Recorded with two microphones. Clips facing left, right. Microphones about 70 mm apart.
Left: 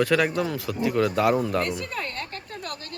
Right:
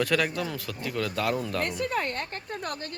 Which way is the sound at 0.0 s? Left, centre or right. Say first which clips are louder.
Left 4 dB; centre.